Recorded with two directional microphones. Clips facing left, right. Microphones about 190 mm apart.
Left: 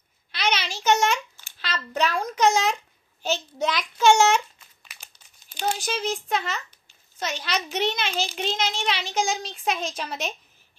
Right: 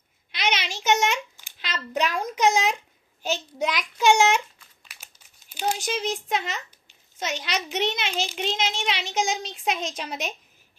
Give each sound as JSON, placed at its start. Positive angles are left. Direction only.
{"t": 0.3, "sound": "a sound", "side_deg": -20}
{"t": 2.3, "sound": "a child's voice", "side_deg": -15}
{"t": 4.8, "sound": "crumpling", "side_deg": -10}
{"t": 5.8, "sound": "a child's voice", "side_deg": -20}